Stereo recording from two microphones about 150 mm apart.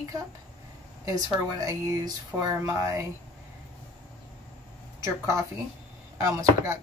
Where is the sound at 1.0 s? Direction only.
20° right (ahead or behind).